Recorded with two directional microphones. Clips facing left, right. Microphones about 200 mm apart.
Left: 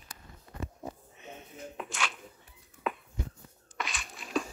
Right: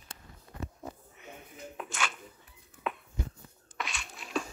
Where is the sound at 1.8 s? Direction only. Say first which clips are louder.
Right 1 dB; centre (ahead or behind).